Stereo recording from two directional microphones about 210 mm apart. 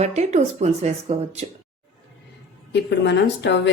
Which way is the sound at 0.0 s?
30° right (ahead or behind).